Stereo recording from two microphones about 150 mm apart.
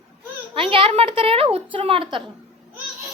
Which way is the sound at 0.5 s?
35° right (ahead or behind).